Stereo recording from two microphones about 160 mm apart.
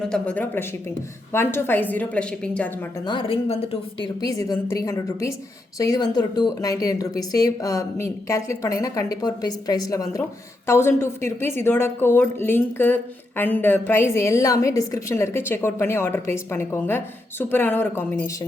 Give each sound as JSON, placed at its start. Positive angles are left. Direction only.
{"t": 0.1, "sound": "a woman's voice", "side_deg": 10}
{"t": 3.1, "sound": "a woman's voice", "side_deg": 35}
{"t": 4.2, "sound": "a woman's voice", "side_deg": 20}